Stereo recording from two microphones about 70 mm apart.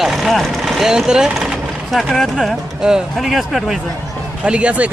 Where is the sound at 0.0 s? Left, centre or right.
Centre.